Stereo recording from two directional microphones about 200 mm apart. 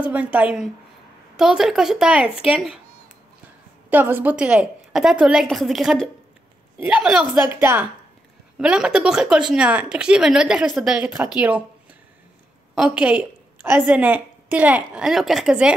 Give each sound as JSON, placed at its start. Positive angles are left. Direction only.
{"t": 0.0, "sound": "a woman's voice", "side_deg": -5}
{"t": 3.9, "sound": "a woman's voice", "side_deg": -10}